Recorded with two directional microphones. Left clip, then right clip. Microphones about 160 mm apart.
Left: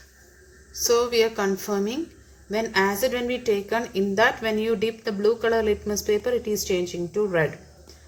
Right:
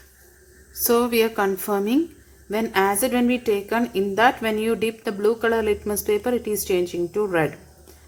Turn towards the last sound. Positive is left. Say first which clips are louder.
# right 1 dB
turn(degrees=-40)  # may be behind; listen again after turning